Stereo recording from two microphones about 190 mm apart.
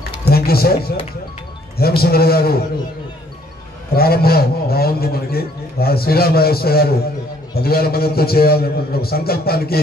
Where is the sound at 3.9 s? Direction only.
55° left (ahead or behind).